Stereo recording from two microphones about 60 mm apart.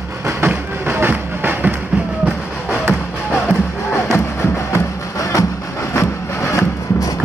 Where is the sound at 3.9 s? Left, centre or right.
Left.